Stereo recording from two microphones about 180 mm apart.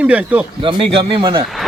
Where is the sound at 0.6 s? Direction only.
30° right (ahead or behind).